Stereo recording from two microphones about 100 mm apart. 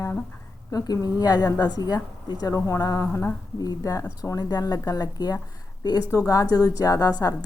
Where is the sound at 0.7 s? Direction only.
40° left (ahead or behind).